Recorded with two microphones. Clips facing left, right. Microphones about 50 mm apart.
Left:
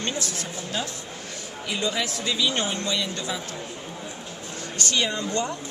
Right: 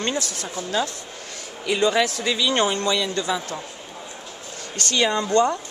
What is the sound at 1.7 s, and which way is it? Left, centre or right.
Speech, right.